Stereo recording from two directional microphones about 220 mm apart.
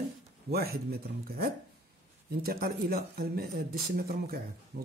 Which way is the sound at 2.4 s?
45° right (ahead or behind).